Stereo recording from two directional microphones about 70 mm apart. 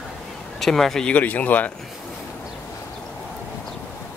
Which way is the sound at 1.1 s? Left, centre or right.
Left.